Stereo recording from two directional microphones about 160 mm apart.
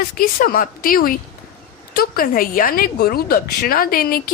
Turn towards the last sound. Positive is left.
turn(degrees=65)  # may be behind; listen again after turning